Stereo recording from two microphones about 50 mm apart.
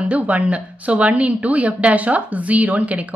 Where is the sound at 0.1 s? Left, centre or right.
Right.